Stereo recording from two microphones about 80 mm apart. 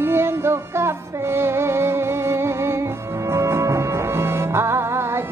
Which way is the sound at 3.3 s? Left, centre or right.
Right.